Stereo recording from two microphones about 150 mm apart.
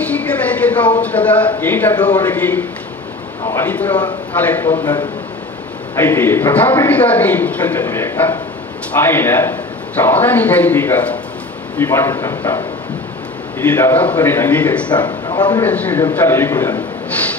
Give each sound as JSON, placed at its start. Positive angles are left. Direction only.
{"t": 0.0, "sound": "a man's voice", "side_deg": 10}
{"t": 5.9, "sound": "a man's voice", "side_deg": 15}
{"t": 14.9, "sound": "speech", "side_deg": 30}
{"t": 15.6, "sound": "a man's voice", "side_deg": 10}